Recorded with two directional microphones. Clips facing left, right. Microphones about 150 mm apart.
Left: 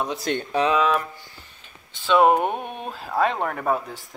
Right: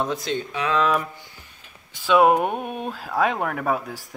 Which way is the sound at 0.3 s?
55° left (ahead or behind).